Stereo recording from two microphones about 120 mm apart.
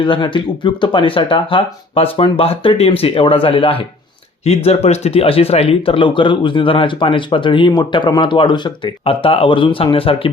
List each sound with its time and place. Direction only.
0.0 s speech: 45° left (ahead or behind)
4.4 s speech: 60° left (ahead or behind)